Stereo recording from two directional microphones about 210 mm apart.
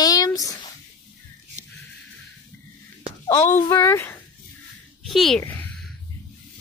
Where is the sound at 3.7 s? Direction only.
15° left (ahead or behind).